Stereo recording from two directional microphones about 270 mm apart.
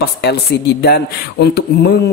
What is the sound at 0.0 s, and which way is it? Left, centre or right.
Speech, left.